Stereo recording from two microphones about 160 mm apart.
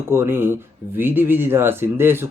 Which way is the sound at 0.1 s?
15° right (ahead or behind).